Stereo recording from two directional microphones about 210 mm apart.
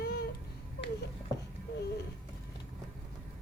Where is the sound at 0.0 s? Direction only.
50° left (ahead or behind).